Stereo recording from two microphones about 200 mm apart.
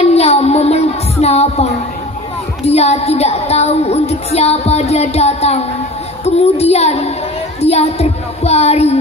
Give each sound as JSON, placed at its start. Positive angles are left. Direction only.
{"t": 0.0, "sound": "child singing", "side_deg": 30}
{"t": 1.2, "sound": "a woman's voice", "side_deg": 30}